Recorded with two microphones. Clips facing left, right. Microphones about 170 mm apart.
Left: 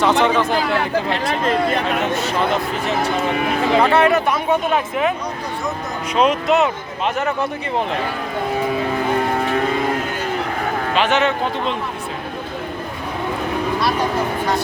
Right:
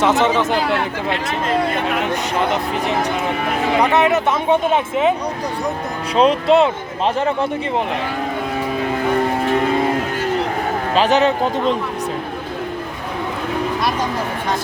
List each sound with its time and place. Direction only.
0.0 s speech: 20° right (ahead or behind)
3.8 s speech: 20° right (ahead or behind)
6.1 s speech: 30° right (ahead or behind)
10.9 s speech: 35° right (ahead or behind)